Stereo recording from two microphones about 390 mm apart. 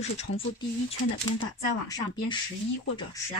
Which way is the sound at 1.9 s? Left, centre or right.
Centre.